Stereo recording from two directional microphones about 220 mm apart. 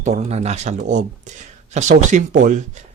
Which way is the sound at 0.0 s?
30° right (ahead or behind).